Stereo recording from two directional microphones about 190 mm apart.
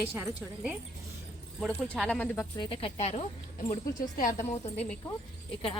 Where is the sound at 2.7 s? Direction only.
30° left (ahead or behind).